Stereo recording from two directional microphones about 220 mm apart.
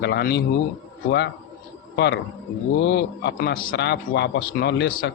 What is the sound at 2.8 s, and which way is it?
A man's voice, 50° left (ahead or behind).